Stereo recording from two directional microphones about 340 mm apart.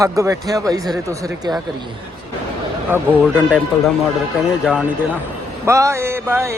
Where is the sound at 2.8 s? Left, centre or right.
Centre.